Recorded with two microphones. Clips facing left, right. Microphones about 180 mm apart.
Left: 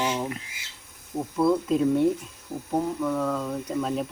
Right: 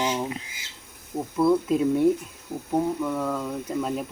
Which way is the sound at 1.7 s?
5° right (ahead or behind).